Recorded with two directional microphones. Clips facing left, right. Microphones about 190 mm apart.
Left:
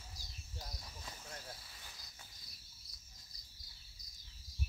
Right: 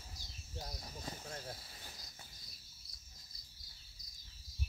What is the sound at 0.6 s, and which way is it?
Cricket, 35° right (ahead or behind).